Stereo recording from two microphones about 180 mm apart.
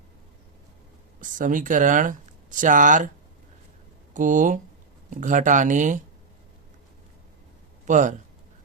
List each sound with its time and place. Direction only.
1.2 s speech: 45° right (ahead or behind)
4.1 s speech: 45° right (ahead or behind)
7.9 s speech: 45° right (ahead or behind)